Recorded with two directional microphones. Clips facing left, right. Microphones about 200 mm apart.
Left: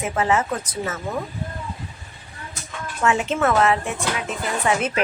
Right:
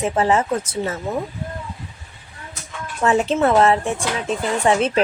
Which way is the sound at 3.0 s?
35° right (ahead or behind).